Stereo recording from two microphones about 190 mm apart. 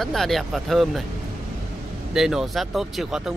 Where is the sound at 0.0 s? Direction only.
Centre (ahead or behind).